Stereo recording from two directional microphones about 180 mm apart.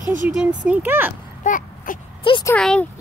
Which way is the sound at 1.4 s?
45° left (ahead or behind).